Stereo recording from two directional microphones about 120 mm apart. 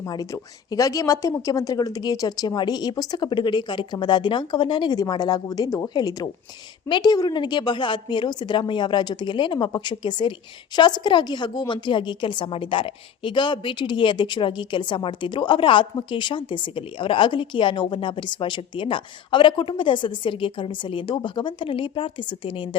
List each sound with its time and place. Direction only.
0.0 s a woman's voice: 30° left (ahead or behind); by 22.8 s 45° left (ahead or behind)